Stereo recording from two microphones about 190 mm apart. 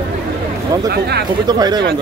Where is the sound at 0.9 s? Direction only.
55° right (ahead or behind).